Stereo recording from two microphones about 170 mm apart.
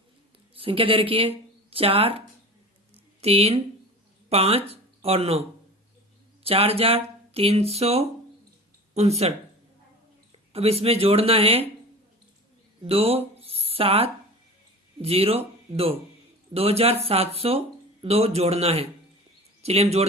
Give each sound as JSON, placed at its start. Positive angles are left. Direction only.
{"t": 0.5, "sound": "speech", "side_deg": -30}
{"t": 10.3, "sound": "speech", "side_deg": -35}
{"t": 12.8, "sound": "speech", "side_deg": -35}